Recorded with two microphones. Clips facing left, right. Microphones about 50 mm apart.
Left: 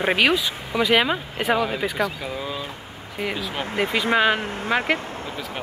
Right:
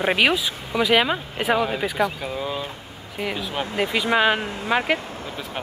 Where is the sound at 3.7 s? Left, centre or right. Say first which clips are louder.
Left 1 dB; left.